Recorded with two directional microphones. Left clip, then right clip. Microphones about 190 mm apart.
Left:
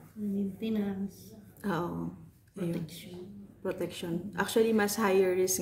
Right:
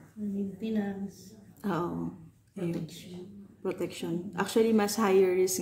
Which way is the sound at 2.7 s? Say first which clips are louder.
Right 1 dB; 20° left (ahead or behind).